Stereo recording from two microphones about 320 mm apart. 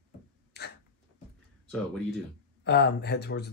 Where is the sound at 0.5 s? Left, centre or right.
Left.